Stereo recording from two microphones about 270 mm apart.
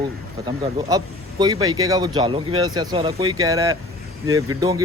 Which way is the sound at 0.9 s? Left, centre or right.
Centre.